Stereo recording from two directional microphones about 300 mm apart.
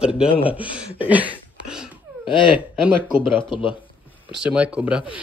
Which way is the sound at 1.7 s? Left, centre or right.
Centre.